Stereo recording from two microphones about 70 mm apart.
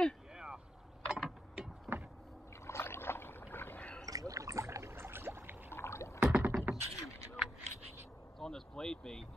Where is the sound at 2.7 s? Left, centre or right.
Left.